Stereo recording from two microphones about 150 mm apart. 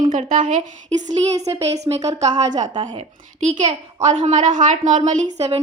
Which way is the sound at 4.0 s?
55° right (ahead or behind).